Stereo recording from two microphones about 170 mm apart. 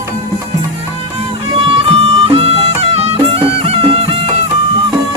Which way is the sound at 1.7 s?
35° right (ahead or behind).